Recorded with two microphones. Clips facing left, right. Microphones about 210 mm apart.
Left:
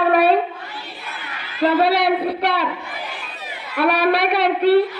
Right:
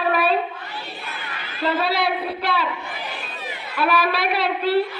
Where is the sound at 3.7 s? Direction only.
65° left (ahead or behind).